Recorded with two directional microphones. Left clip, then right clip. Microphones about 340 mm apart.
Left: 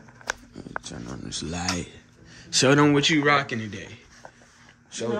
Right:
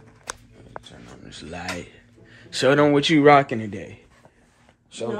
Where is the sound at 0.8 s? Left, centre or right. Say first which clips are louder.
Left 6 dB; centre.